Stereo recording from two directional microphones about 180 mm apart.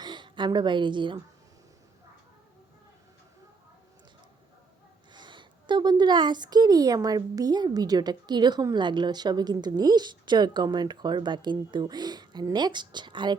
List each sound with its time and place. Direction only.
0.0 s a woman's voice: 25° right (ahead or behind)
5.1 s a woman's voice: 25° right (ahead or behind)